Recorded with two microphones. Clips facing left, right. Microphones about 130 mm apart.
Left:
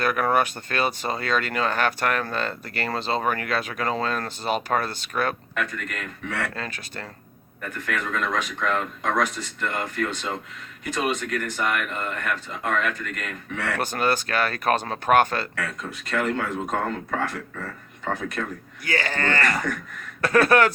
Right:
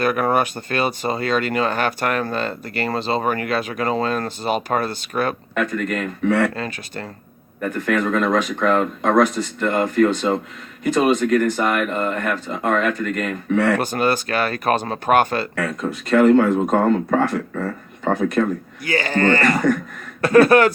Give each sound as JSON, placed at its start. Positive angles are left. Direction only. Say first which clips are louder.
{"t": 0.0, "sound": "speech", "louder": "right 3 dB", "side_deg": -10}
{"t": 5.5, "sound": "speech", "louder": "right 8 dB", "side_deg": -35}
{"t": 6.6, "sound": "speech", "louder": "right 6 dB", "side_deg": -5}
{"t": 7.6, "sound": "speech", "louder": "right 9 dB", "side_deg": -30}
{"t": 9.2, "sound": "speech", "louder": "right 8 dB", "side_deg": -30}
{"t": 13.7, "sound": "speech", "louder": "right 4 dB", "side_deg": -5}
{"t": 15.5, "sound": "speech", "louder": "right 8 dB", "side_deg": -35}
{"t": 18.9, "sound": "speech", "louder": "right 8 dB", "side_deg": -5}